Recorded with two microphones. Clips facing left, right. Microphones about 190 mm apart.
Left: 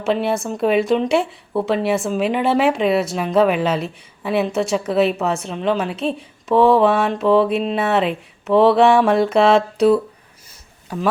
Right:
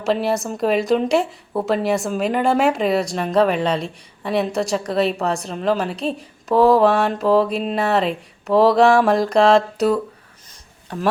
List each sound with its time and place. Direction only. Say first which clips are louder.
0.0 s speech: even; centre (ahead or behind)